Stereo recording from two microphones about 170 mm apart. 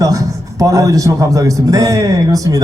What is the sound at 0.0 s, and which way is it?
A man's voice, 20° right (ahead or behind).